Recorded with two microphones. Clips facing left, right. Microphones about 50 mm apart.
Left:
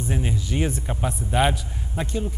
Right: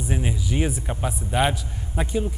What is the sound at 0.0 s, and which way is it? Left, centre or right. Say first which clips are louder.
Speech: even; centre.